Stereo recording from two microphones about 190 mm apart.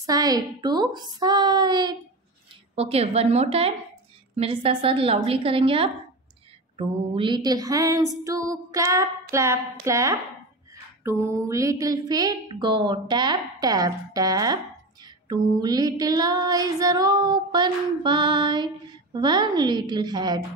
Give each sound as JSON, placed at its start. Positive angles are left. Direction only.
{"t": 0.0, "sound": "a woman's voice", "side_deg": -20}
{"t": 2.7, "sound": "a woman's voice", "side_deg": -30}
{"t": 6.8, "sound": "a sound", "side_deg": -25}
{"t": 11.1, "sound": "a woman's voice", "side_deg": -15}